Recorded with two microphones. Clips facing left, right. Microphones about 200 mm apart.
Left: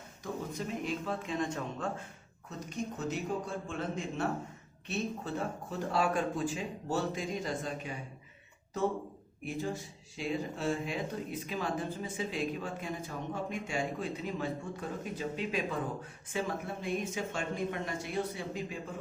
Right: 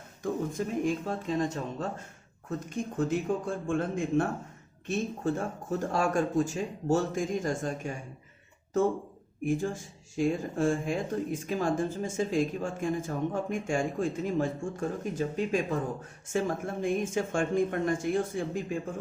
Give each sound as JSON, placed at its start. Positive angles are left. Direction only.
{"t": 0.2, "sound": "speech", "side_deg": -50}
{"t": 2.5, "sound": "speech", "side_deg": -50}
{"t": 9.4, "sound": "speech", "side_deg": -50}